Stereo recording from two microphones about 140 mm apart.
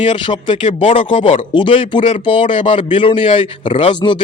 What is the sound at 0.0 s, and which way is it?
Speech, 35° left (ahead or behind).